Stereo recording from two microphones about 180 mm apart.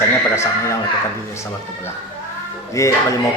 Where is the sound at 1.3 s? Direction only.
15° left (ahead or behind).